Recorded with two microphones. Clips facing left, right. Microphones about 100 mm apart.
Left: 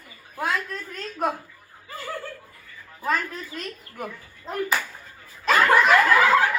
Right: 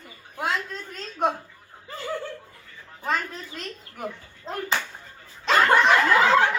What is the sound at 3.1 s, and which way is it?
A woman's voice, 25° right (ahead or behind).